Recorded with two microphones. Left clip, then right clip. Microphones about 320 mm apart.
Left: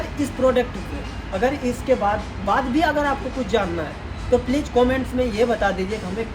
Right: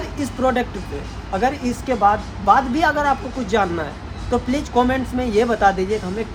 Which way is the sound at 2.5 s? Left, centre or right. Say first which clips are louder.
Right 2 dB; centre.